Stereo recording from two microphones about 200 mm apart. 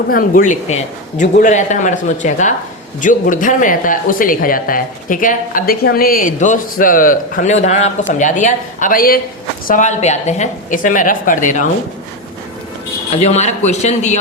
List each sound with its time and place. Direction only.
0.1 s speech: 45° left (ahead or behind)
13.1 s speech: 35° left (ahead or behind)